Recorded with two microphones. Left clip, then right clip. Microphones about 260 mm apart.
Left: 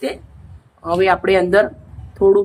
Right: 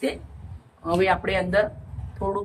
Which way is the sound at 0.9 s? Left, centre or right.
Left.